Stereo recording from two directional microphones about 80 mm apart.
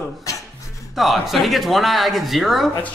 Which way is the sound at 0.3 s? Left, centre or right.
Left.